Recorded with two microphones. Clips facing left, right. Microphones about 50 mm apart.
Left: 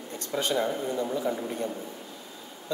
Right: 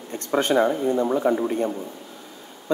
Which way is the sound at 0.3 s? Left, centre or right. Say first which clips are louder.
Right 8 dB; right.